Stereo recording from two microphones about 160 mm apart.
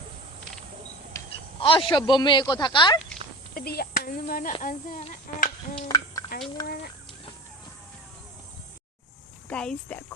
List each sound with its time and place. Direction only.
1.2 s a sound: 20° left (ahead or behind)
1.6 s speech: 35° left (ahead or behind)
3.5 s speech: 75° left (ahead or behind); by 5.5 s 50° left (ahead or behind)
5.9 s a sound: 20° left (ahead or behind)
6.6 s chicken: 25° left (ahead or behind)
9.5 s speech: 5° left (ahead or behind)